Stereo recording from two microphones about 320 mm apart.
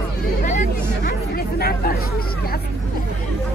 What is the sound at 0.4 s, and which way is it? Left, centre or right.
Hubbub, left.